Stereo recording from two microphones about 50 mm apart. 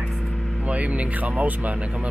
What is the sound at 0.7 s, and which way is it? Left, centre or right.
Speech, right.